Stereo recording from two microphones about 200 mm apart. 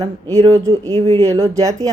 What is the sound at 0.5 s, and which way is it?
Speech, 15° right (ahead or behind).